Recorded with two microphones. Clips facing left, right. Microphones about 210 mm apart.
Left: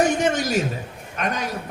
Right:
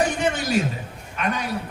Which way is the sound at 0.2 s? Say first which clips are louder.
Left 1 dB; 40° left (ahead or behind).